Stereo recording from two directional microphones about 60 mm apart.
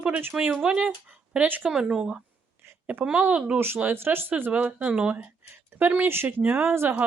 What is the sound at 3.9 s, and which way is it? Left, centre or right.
Speech, right.